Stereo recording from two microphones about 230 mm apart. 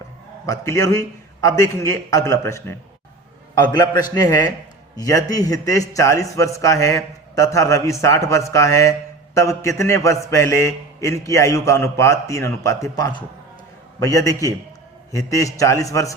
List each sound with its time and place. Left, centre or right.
0.4 s a man's voice: centre